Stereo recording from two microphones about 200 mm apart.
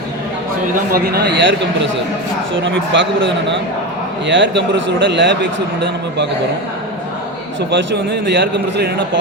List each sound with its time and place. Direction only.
0.9 s a man's voice: 50° right (ahead or behind); by 3.1 s 70° right (ahead or behind)
4.3 s a man's voice: 65° right (ahead or behind)
7.7 s a man's voice: 65° right (ahead or behind)